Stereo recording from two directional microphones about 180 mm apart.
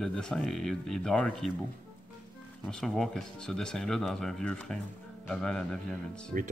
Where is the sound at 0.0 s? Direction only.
5° left (ahead or behind).